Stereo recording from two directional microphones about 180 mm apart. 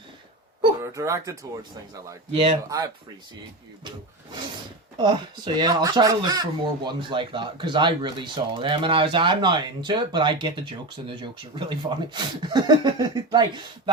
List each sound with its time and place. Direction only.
0.8 s speech: 15° right (ahead or behind)
2.3 s speech: 30° right (ahead or behind)
4.9 s speech: 25° right (ahead or behind)